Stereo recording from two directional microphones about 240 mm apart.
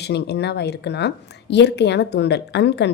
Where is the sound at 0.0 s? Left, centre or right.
Left.